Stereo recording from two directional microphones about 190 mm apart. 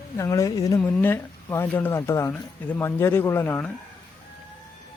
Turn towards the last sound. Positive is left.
turn(degrees=10)  # may be behind; listen again after turning